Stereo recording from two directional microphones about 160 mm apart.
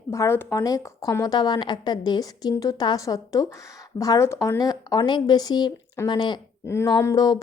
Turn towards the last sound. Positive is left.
turn(degrees=25)  # may be behind; listen again after turning